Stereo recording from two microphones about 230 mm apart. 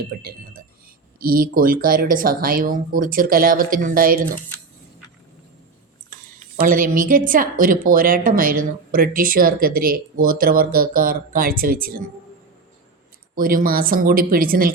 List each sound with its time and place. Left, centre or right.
0.1 s speech: right
6.6 s speech: right
13.3 s speech: right